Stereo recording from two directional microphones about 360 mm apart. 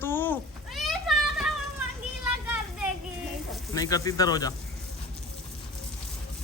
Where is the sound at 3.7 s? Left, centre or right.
Centre.